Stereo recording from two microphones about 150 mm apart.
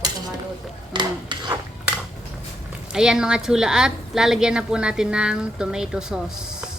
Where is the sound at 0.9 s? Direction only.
30° right (ahead or behind).